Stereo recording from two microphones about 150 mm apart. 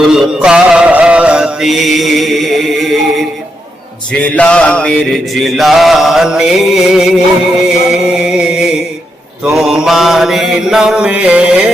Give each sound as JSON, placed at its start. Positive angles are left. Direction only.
{"t": 0.1, "sound": "mantra", "side_deg": -5}
{"t": 7.7, "sound": "music", "side_deg": -5}
{"t": 9.6, "sound": "mantra", "side_deg": -5}